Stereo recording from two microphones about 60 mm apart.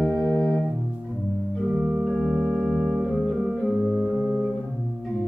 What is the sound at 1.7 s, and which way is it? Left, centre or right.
Organ, centre.